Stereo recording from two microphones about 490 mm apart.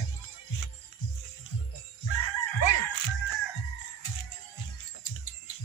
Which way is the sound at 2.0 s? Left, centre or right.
Left.